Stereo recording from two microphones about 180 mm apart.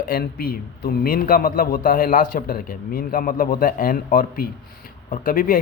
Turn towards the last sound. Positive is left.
turn(degrees=50)  # may be behind; listen again after turning